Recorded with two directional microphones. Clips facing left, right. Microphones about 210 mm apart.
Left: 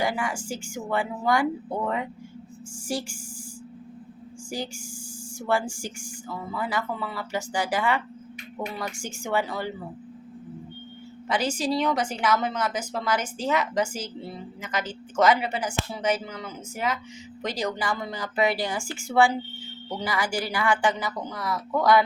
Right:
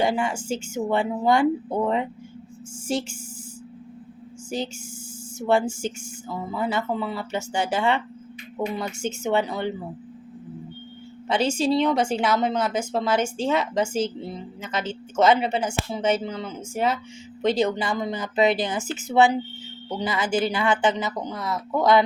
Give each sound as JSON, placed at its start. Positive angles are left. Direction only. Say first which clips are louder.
{"t": 0.0, "sound": "a woman's voice", "louder": "right 4 dB", "side_deg": -25}
{"t": 4.4, "sound": "a woman's voice", "louder": "right 4 dB", "side_deg": -20}
{"t": 11.3, "sound": "a woman's voice", "louder": "right 4 dB", "side_deg": -25}